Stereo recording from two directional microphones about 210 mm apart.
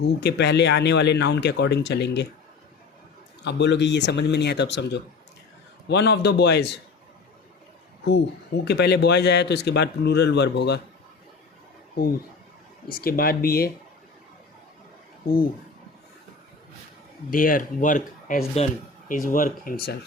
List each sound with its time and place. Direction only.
0.0 s speech: 55° left (ahead or behind)
3.4 s speech: 55° left (ahead or behind)
8.6 s speech: 50° left (ahead or behind)
12.0 s speech: 45° left (ahead or behind)
17.3 s speech: 40° left (ahead or behind)